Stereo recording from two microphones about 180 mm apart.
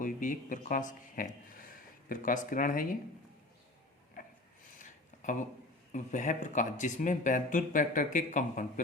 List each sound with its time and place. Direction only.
0.0 s speech: 45° left (ahead or behind)
4.8 s a sound: 45° left (ahead or behind)
5.9 s speech: 45° left (ahead or behind)